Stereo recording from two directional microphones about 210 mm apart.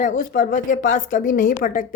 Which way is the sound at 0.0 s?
40° left (ahead or behind).